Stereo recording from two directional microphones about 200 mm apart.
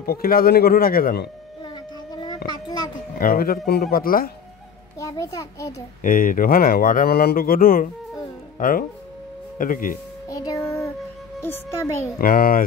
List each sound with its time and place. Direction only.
0.0 s speech: 50° left (ahead or behind)
2.1 s child singing: 20° left (ahead or behind)
3.2 s speech: 45° left (ahead or behind)
4.9 s a child's voice: 15° left (ahead or behind)
6.0 s speech: 40° left (ahead or behind)
10.2 s music: 15° left (ahead or behind)
11.4 s a child's voice: 10° left (ahead or behind)
12.2 s speech: 45° left (ahead or behind)